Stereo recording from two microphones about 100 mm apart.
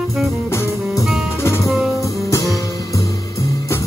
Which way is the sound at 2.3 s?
35° left (ahead or behind).